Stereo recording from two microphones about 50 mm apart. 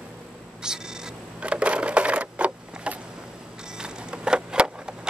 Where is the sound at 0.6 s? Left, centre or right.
Centre.